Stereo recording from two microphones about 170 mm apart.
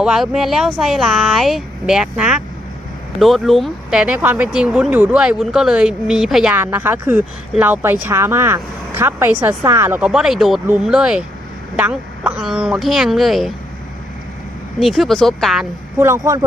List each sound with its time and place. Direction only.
0.0 s speech: 5° right (ahead or behind)
10.1 s speech: 5° right (ahead or behind)
14.8 s speech: centre (ahead or behind)
16.0 s speech: 15° right (ahead or behind)